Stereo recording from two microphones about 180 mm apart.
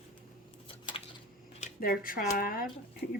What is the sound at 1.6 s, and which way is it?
Speech, 50° left (ahead or behind).